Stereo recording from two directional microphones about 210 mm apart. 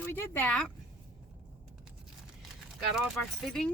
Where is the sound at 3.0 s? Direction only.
Centre (ahead or behind).